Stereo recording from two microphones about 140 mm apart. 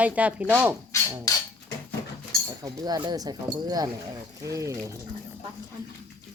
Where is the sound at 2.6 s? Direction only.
25° right (ahead or behind).